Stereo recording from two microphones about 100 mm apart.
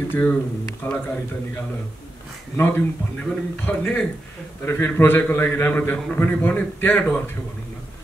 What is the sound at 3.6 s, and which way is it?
A man's voice, 15° left (ahead or behind).